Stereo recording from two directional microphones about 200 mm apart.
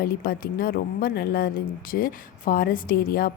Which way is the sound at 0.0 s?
50° left (ahead or behind).